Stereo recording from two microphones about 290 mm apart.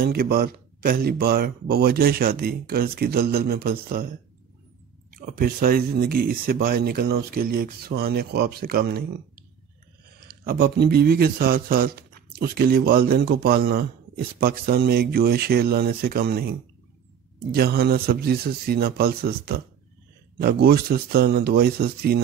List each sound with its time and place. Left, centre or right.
0.0 s speech: right
5.1 s speech: right
10.2 s speech: right